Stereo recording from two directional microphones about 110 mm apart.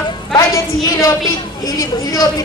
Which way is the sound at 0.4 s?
30° left (ahead or behind).